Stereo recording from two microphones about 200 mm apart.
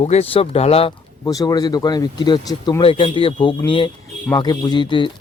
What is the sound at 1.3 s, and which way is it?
Speech, 20° left (ahead or behind).